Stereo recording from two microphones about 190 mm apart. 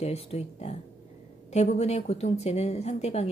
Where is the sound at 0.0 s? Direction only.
35° left (ahead or behind).